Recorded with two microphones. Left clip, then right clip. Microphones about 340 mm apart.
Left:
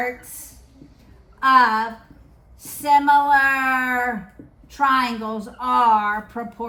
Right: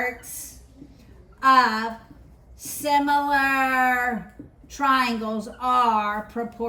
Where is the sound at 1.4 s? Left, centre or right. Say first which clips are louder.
Left 3 dB; centre.